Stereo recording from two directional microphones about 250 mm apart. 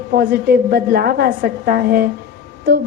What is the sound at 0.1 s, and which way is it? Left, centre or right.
A woman's voice, right.